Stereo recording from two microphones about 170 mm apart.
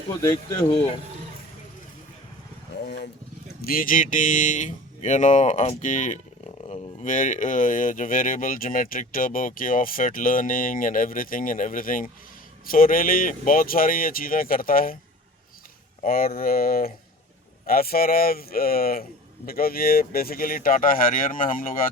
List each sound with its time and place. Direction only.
0.2 s speech: 20° left (ahead or behind)
2.8 s speech: 75° left (ahead or behind)
3.6 s speech: 55° left (ahead or behind)
16.0 s speech: 60° left (ahead or behind)